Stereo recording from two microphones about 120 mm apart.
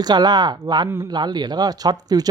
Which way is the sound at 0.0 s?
35° right (ahead or behind).